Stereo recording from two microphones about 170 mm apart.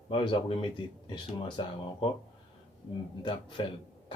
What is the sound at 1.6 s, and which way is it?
Speech, 30° left (ahead or behind).